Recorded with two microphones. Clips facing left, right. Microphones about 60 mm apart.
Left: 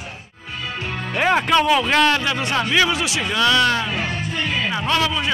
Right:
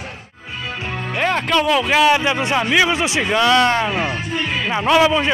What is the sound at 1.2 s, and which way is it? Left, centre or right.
A man's voice, centre.